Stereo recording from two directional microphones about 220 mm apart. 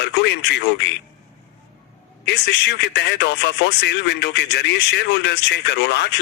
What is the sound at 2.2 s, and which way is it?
Speech, 50° left (ahead or behind).